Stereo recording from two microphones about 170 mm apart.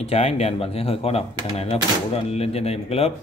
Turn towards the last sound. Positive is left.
turn(degrees=35)  # may be behind; listen again after turning